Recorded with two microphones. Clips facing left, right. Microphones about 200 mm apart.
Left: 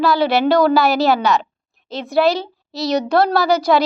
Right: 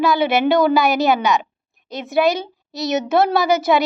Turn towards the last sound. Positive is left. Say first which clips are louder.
# left 1 dB
turn(degrees=-20)  # may be behind; listen again after turning